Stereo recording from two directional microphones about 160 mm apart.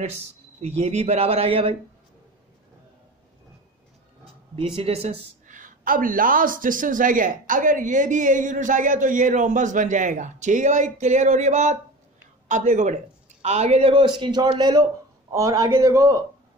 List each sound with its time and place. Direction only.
0.6 s speech: 45° right (ahead or behind)
4.2 s a sound: 35° right (ahead or behind)
5.5 s a woman's voice: 55° right (ahead or behind); by 16.2 s 20° right (ahead or behind)